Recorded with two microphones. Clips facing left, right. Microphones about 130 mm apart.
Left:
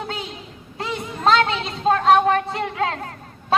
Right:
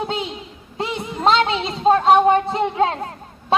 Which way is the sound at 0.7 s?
30° right (ahead or behind).